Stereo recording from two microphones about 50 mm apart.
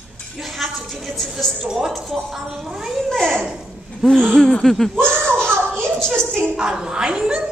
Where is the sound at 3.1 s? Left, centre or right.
Centre.